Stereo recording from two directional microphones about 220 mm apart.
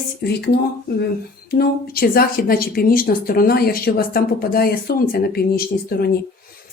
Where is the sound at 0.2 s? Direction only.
50° left (ahead or behind).